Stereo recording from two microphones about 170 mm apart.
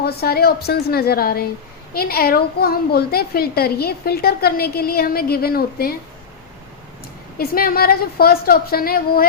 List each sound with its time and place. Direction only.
0.0 s a woman's voice: 65° left (ahead or behind)
7.3 s a child's voice: 60° left (ahead or behind)